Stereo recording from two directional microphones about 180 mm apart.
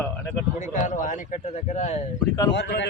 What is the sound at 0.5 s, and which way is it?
Speech, 45° left (ahead or behind).